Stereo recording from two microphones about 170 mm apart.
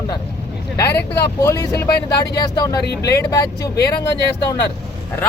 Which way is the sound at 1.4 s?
20° left (ahead or behind).